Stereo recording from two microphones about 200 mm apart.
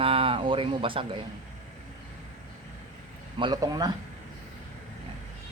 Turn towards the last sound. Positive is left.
turn(degrees=-20)  # may be behind; listen again after turning